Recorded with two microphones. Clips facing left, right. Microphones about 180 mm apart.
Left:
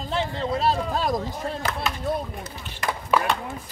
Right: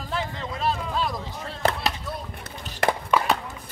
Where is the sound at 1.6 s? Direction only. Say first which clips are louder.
Right 10 dB; 45° right (ahead or behind).